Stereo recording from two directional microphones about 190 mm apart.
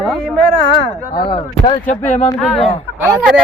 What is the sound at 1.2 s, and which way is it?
Speech, 25° left (ahead or behind).